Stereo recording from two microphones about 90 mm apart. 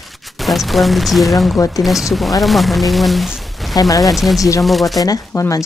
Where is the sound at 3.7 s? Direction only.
40° left (ahead or behind).